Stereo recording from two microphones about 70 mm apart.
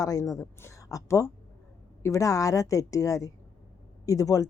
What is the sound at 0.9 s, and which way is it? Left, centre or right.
A woman's voice, left.